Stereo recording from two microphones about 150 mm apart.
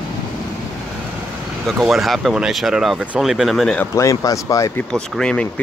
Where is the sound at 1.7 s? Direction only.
Centre (ahead or behind).